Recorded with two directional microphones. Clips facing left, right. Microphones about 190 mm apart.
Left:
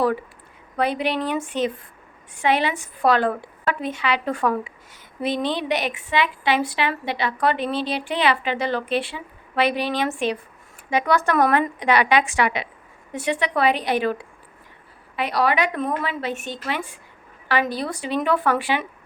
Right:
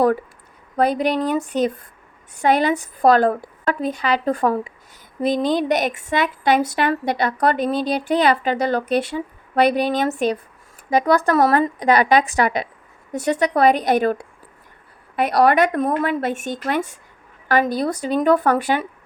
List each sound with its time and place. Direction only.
0.8 s a woman's voice: 40° right (ahead or behind)